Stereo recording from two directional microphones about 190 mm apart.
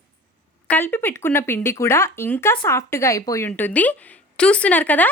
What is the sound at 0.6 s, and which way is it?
Speech, 10° left (ahead or behind).